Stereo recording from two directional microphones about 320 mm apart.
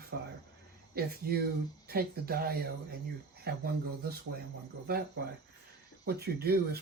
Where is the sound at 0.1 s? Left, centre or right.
Right.